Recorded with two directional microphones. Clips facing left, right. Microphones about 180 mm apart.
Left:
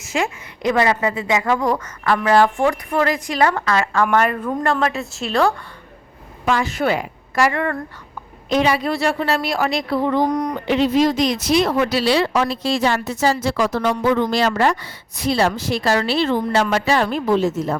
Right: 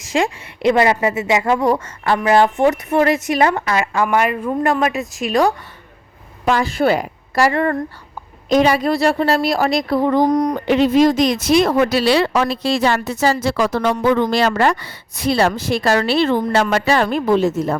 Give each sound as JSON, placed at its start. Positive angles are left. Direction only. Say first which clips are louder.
{"t": 0.1, "sound": "a woman's voice", "louder": "right 4 dB", "side_deg": -30}
{"t": 6.4, "sound": "a woman's voice", "louder": "right 3 dB", "side_deg": -35}
{"t": 10.7, "sound": "a woman's voice", "louder": "right 3 dB", "side_deg": -50}